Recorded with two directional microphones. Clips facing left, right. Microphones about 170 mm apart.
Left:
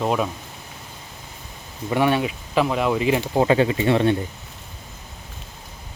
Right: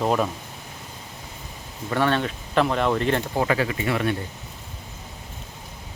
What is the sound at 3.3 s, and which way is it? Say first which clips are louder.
Speech: left 5 dB; 25° left (ahead or behind).